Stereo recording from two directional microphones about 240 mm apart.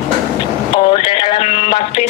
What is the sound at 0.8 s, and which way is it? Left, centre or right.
Music, left.